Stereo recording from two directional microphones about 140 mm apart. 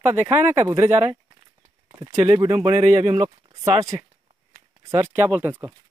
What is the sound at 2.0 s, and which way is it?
Speech, 25° right (ahead or behind).